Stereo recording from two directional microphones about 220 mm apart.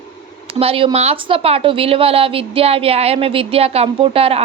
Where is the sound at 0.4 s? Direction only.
25° right (ahead or behind).